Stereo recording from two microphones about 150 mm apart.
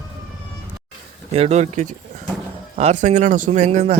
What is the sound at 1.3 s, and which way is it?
Speech, 45° right (ahead or behind).